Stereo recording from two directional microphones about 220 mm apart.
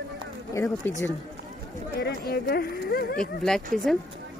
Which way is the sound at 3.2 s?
Centre (ahead or behind).